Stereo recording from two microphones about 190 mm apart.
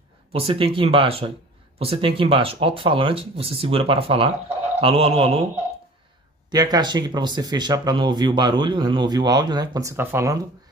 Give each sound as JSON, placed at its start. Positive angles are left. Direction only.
{"t": 0.3, "sound": "speech", "side_deg": -30}
{"t": 6.5, "sound": "speech", "side_deg": -20}